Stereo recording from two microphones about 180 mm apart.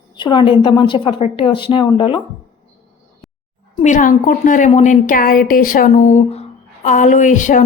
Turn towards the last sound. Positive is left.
turn(degrees=45)  # may be behind; listen again after turning